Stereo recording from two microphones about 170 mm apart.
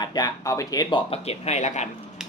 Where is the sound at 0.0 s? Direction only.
25° left (ahead or behind); by 1.9 s 40° left (ahead or behind).